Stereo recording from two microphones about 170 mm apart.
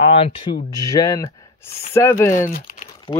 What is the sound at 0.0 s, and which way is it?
Speech, 35° left (ahead or behind).